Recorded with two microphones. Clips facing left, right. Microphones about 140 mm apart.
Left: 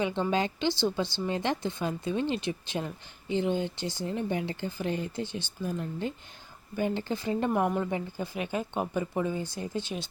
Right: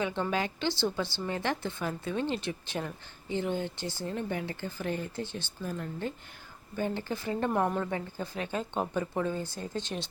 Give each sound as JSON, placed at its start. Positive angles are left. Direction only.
{"t": 0.0, "sound": "a woman's voice", "side_deg": 20}
{"t": 7.5, "sound": "a woman's voice", "side_deg": 10}